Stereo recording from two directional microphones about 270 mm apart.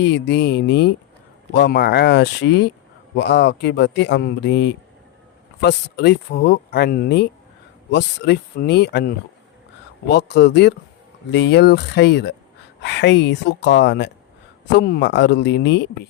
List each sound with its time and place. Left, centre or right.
0.0 s speech: left